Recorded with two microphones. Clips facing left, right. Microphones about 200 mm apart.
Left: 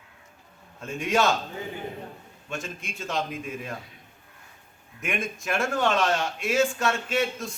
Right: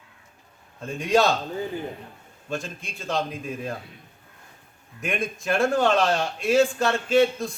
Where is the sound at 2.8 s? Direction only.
35° right (ahead or behind).